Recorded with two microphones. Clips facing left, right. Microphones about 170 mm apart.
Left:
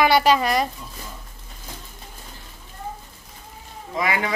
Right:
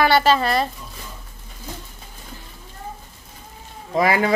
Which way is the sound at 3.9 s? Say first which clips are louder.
Right 6 dB; 35° right (ahead or behind).